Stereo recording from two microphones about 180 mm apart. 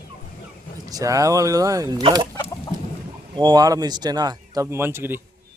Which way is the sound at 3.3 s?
25° right (ahead or behind).